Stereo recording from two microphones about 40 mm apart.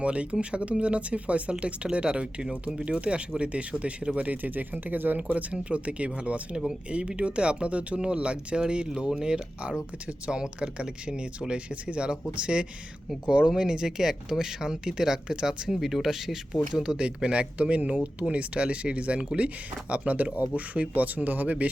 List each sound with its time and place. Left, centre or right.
0.0 s speech: right
4.3 s speech: right
5.3 s speech: right
9.0 s speech: centre
9.3 s speech: right
17.6 s speech: right